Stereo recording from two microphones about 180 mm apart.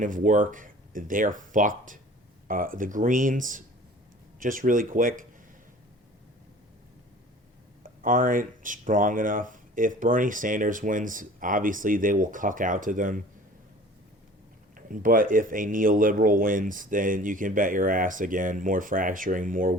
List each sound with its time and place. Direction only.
0.0 s speech: 45° right (ahead or behind)
8.0 s speech: 50° right (ahead or behind)
14.8 s speech: 50° right (ahead or behind)